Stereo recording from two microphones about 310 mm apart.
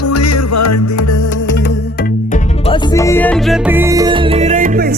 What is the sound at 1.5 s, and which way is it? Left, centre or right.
Music, left.